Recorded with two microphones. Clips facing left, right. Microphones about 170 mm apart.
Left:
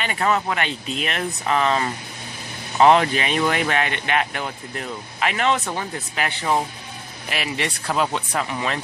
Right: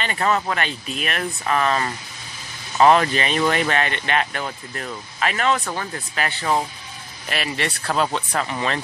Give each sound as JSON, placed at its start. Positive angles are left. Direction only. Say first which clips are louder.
{"t": 0.0, "sound": "speech", "louder": "even", "side_deg": 10}